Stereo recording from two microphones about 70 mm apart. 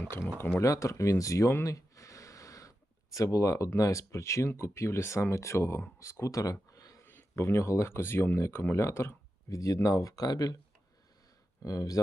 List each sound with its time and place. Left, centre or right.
0.3 s speech: left
0.6 s speech: left
1.6 s a sound: left
3.8 s speech: left
7.0 s speech: left
11.6 s speech: left